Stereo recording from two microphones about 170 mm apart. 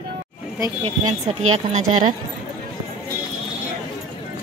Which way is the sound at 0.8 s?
35° right (ahead or behind).